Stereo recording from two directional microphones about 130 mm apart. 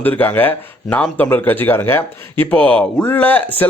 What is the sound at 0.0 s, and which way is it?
Speech, 15° left (ahead or behind).